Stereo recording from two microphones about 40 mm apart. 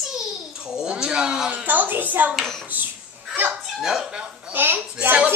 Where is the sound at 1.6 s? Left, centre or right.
Right.